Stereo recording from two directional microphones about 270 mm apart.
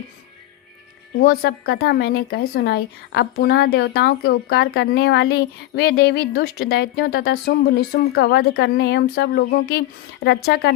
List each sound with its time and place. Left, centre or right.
1.2 s a woman's voice: left